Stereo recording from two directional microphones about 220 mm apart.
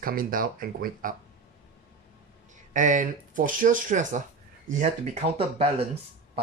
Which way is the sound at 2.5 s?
35° right (ahead or behind).